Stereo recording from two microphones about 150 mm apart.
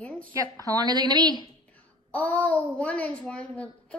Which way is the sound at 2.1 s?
10° left (ahead or behind).